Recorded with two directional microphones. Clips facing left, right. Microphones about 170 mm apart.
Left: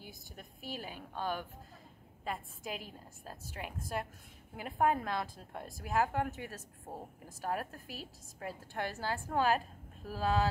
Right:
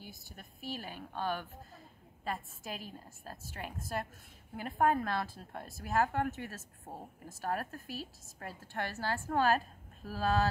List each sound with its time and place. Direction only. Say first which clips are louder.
0.0 s a woman's voice: even; 15° left (ahead or behind)